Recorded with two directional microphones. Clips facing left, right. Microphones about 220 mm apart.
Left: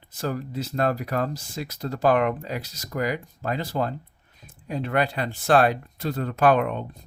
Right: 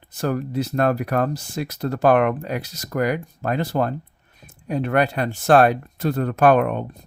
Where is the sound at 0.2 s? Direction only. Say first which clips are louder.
Right 6 dB; 60° right (ahead or behind).